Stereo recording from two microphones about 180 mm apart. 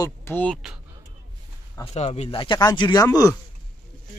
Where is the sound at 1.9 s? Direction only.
35° left (ahead or behind); by 3.4 s 20° left (ahead or behind).